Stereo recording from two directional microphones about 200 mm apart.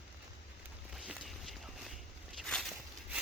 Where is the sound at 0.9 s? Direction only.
Centre (ahead or behind).